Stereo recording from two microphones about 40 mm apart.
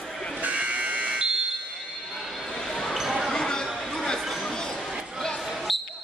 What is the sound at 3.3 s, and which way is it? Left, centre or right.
Chatter, centre.